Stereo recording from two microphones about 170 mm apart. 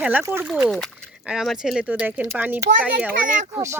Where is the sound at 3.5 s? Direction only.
20° right (ahead or behind).